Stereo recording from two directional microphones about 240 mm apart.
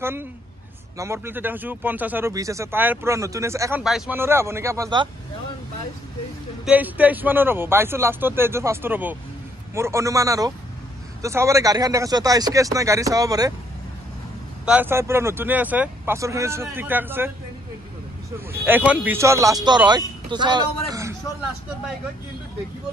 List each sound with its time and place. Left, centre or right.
0.0 s a woman's voice: centre
6.6 s speech: centre
14.7 s speech: centre
18.9 s speech: centre
20.9 s a sound: centre